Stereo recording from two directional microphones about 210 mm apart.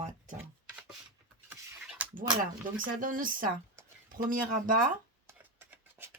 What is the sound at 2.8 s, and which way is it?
Speech, 40° right (ahead or behind).